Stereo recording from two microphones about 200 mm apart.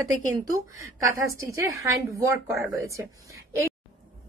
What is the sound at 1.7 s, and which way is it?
A woman's voice, 15° right (ahead or behind).